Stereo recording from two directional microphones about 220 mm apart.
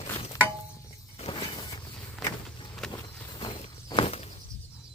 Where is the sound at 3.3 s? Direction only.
20° left (ahead or behind).